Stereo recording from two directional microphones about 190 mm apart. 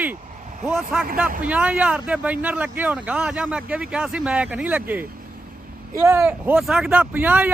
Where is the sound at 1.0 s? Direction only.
50° right (ahead or behind).